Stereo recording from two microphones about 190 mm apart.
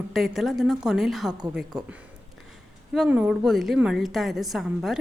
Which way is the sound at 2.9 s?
10° right (ahead or behind).